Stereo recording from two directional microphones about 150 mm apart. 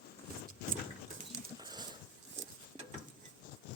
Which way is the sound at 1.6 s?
25° right (ahead or behind).